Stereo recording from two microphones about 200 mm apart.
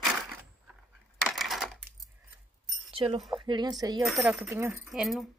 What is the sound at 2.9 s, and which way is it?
Speech, 25° right (ahead or behind).